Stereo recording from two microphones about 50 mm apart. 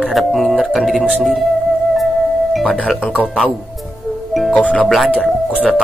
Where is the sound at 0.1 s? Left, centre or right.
Centre.